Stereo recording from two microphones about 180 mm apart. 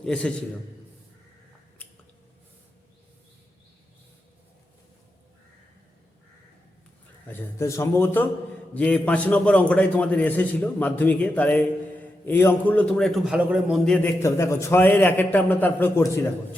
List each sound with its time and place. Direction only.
0.0 s a man's voice: 5° left (ahead or behind)
7.3 s a man's voice: 15° left (ahead or behind)
14.2 s a man's voice: 15° left (ahead or behind)